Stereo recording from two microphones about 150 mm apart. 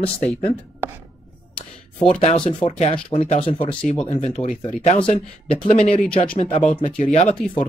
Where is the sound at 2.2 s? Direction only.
35° left (ahead or behind); by 4.5 s 50° left (ahead or behind).